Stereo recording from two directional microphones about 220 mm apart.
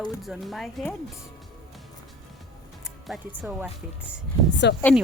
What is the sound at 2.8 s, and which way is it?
Speech, centre (ahead or behind).